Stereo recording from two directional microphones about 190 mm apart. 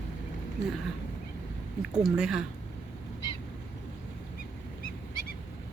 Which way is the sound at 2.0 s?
5° right (ahead or behind).